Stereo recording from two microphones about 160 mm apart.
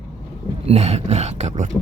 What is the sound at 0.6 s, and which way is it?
Speech, 40° right (ahead or behind).